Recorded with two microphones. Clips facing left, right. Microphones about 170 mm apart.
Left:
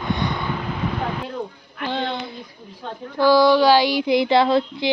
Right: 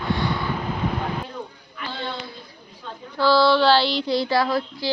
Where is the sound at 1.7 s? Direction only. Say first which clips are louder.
Left 7 dB; 50° left (ahead or behind).